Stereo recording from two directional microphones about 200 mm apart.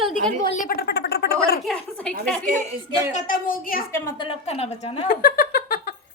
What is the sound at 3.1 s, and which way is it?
Speech, 45° left (ahead or behind).